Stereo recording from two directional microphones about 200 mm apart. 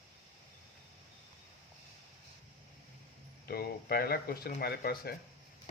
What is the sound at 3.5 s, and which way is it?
Speech, 50° left (ahead or behind).